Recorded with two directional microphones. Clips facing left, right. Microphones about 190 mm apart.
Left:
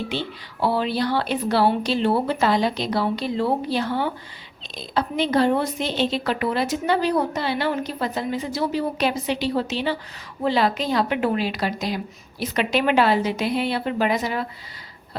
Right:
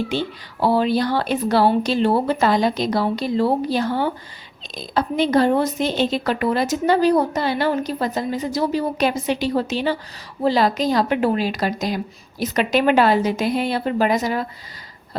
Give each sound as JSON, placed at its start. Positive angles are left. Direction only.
{"t": 0.1, "sound": "a woman's voice", "side_deg": -45}